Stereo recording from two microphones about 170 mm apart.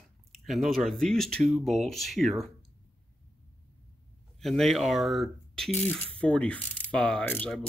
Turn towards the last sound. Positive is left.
turn(degrees=5)  # may be behind; listen again after turning